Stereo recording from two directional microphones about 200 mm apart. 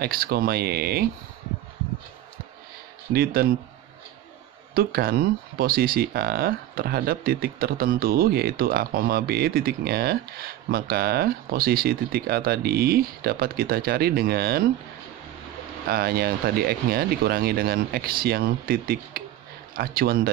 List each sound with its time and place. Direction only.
0.0 s speech: 50° right (ahead or behind)
3.1 s speech: 50° right (ahead or behind)
4.7 s speech: 50° right (ahead or behind)
15.9 s speech: 50° right (ahead or behind)